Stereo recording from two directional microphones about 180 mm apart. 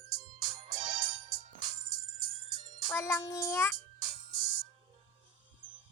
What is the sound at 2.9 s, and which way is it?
Child singing, 15° left (ahead or behind).